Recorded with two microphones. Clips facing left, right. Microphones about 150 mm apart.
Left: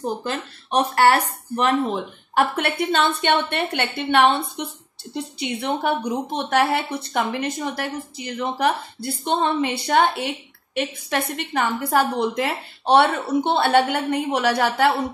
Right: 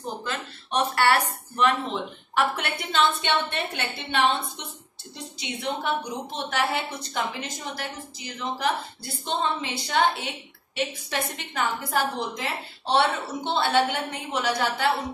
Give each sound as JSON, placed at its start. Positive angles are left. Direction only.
{"t": 0.2, "sound": "a woman's voice", "side_deg": 45}